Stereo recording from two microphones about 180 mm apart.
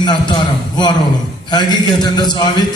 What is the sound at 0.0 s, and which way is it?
A man's voice, 25° left (ahead or behind).